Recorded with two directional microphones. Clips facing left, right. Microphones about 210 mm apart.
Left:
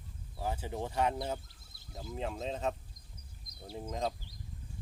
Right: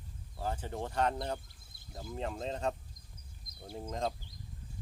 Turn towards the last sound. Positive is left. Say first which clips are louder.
# even
turn(degrees=0)  # may be behind; listen again after turning